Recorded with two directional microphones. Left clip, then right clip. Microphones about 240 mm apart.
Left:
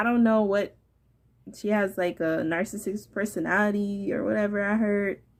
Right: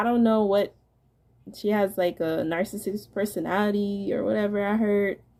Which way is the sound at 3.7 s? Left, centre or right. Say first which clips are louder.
Right 3 dB; left.